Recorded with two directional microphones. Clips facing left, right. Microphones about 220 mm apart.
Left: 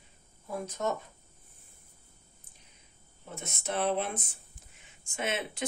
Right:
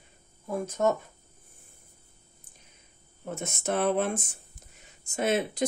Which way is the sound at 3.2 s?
50° right (ahead or behind).